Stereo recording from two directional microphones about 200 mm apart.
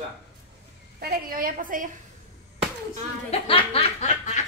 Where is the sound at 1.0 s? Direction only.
50° right (ahead or behind).